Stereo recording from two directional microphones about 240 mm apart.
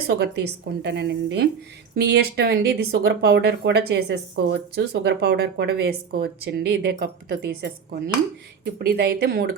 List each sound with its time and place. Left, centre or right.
0.1 s speech: right
8.8 s speech: right